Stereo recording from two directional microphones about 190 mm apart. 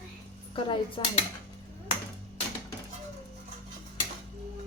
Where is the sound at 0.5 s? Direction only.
25° left (ahead or behind).